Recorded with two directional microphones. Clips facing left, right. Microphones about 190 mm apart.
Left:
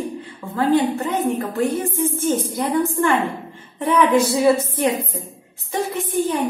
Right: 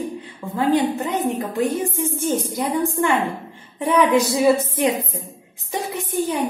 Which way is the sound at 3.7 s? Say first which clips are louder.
Even; 15° right (ahead or behind).